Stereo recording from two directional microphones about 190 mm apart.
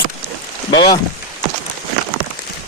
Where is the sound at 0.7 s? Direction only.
20° left (ahead or behind).